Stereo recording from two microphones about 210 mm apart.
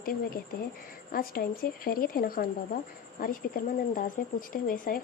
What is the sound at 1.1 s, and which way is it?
Speech, 45° left (ahead or behind).